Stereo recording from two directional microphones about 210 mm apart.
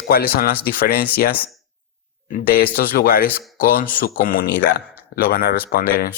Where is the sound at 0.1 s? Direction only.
45° left (ahead or behind).